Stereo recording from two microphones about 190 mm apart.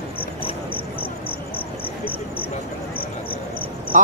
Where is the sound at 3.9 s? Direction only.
40° right (ahead or behind).